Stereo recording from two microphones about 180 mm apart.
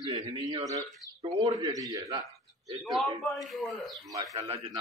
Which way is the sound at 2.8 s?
Centre (ahead or behind).